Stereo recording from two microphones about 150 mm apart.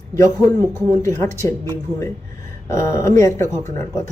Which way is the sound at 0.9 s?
20° left (ahead or behind).